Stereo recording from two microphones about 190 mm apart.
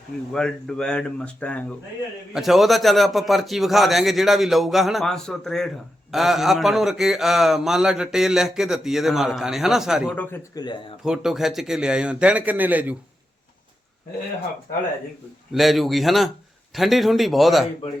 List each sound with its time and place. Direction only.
0.3 s a man's voice: 5° left (ahead or behind)
10.2 s speech: 10° left (ahead or behind)
10.6 s speech: 25° left (ahead or behind)
11.0 s a man's voice: centre (ahead or behind)
15.5 s a man's voice: centre (ahead or behind)